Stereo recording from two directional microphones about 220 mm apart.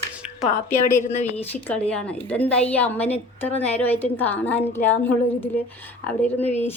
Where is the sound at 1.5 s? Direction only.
5° left (ahead or behind).